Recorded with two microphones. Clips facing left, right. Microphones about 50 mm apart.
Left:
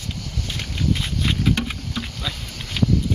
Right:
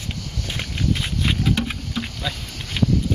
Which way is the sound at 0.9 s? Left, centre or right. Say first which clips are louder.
Even; centre.